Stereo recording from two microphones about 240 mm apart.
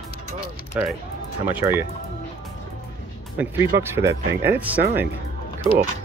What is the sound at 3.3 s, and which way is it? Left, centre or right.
Speech, centre.